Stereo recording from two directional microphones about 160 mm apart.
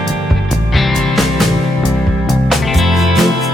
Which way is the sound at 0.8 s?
Centre (ahead or behind).